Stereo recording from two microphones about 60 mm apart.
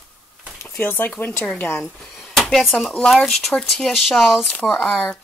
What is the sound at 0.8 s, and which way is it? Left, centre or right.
Speech, left.